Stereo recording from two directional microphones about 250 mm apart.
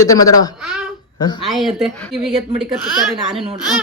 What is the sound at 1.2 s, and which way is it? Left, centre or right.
Speech, centre.